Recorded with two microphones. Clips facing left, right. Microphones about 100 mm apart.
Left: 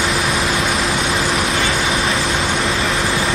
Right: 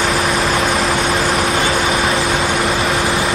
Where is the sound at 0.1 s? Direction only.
30° right (ahead or behind).